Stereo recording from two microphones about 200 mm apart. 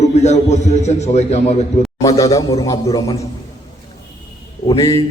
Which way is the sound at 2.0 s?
15° left (ahead or behind).